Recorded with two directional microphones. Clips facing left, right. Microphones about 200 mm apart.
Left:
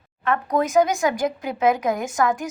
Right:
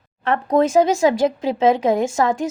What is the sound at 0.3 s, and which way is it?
Speech, 30° right (ahead or behind).